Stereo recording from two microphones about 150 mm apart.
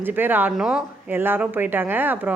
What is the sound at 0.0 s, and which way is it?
A woman's voice, 15° right (ahead or behind).